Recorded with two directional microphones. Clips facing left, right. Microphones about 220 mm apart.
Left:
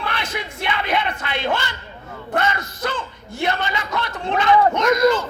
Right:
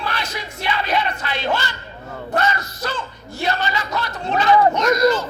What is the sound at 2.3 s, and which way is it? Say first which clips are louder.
Bellow: right 1 dB; 55° left (ahead or behind).